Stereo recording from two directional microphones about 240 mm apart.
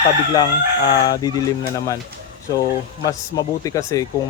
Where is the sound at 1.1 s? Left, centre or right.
Centre.